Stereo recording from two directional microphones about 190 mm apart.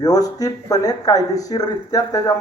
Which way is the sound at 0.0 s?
20° left (ahead or behind).